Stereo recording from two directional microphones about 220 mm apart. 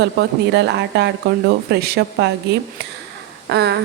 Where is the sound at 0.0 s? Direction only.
50° right (ahead or behind).